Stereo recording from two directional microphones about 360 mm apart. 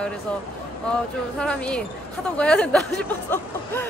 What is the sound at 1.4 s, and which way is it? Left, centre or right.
Speech, centre.